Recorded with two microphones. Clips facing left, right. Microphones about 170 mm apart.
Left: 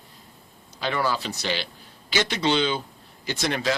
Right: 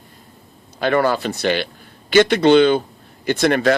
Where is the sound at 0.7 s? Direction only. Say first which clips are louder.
Right 9 dB; 55° right (ahead or behind).